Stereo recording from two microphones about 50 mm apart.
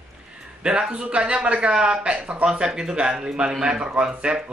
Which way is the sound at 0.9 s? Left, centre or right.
Centre.